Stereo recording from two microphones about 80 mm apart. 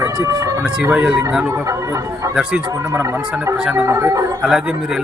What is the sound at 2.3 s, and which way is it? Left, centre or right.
Speech, centre.